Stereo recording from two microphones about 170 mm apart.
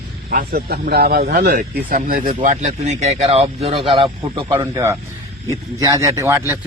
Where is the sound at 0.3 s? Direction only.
60° right (ahead or behind).